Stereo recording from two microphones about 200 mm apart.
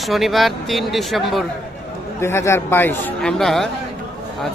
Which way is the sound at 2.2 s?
15° left (ahead or behind).